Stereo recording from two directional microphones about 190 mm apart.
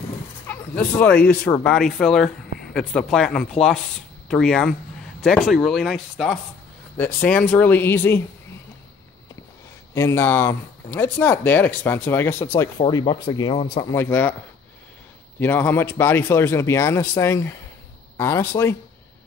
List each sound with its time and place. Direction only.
0.5 s speech: 10° left (ahead or behind)
7.0 s speech: 10° left (ahead or behind)
9.9 s speech: 15° left (ahead or behind)
12.7 s speech: 25° left (ahead or behind)
13.9 s speech: 10° left (ahead or behind)
15.4 s speech: 10° left (ahead or behind)